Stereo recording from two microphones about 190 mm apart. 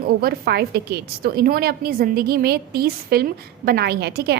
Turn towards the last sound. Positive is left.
turn(degrees=-60)  # may be behind; listen again after turning